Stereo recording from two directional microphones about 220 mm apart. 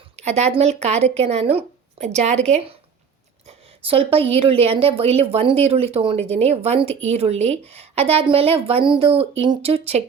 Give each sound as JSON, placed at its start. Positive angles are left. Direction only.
{"t": 0.2, "sound": "speech", "side_deg": -30}